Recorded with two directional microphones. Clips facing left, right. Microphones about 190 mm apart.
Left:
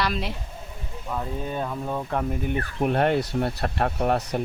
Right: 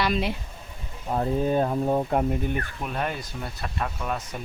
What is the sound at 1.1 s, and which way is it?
Speech, 40° right (ahead or behind).